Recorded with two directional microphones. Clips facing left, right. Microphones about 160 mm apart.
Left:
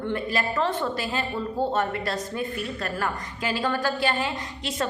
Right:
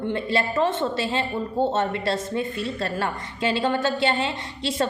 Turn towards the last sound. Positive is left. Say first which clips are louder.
# right 4 dB
turn(degrees=-25)  # may be behind; listen again after turning